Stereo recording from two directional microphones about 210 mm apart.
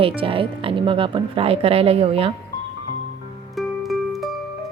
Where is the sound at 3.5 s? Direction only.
Centre (ahead or behind).